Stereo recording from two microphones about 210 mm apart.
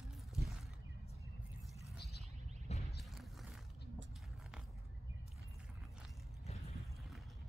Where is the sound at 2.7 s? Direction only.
30° left (ahead or behind).